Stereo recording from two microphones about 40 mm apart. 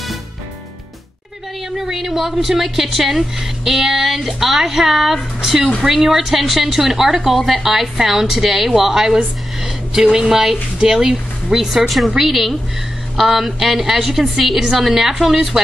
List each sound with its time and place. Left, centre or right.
1.8 s a woman's voice: centre
14.4 s a woman's voice: centre